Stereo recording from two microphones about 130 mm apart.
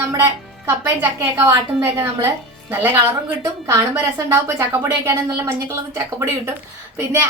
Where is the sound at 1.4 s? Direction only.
20° right (ahead or behind).